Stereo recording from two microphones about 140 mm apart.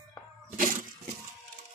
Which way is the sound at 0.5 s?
75° right (ahead or behind).